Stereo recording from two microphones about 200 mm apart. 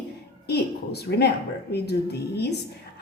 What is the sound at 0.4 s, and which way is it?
A woman's voice, 55° left (ahead or behind).